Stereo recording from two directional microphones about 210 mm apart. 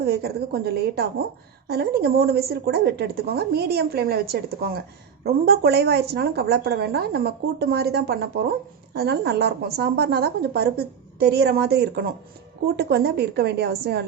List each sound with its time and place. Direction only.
0.0 s a woman's voice: 50° right (ahead or behind)